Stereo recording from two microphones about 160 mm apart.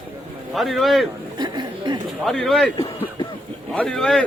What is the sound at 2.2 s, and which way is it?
Speech, centre (ahead or behind).